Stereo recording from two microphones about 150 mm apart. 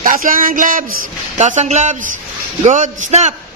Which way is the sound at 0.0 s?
65° right (ahead or behind).